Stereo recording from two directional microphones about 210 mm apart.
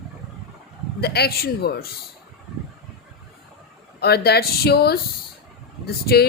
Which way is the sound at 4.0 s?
50° left (ahead or behind).